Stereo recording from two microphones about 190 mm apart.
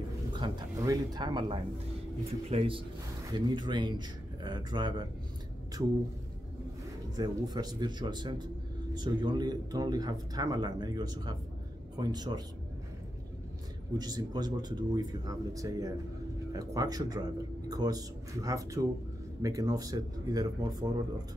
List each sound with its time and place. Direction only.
0.3 s a man's voice: 25° right (ahead or behind)
7.2 s a man's voice: 20° right (ahead or behind)
13.9 s a man's voice: 20° right (ahead or behind)